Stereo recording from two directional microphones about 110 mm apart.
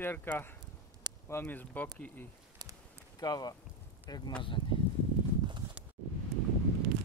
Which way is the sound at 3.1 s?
35° left (ahead or behind).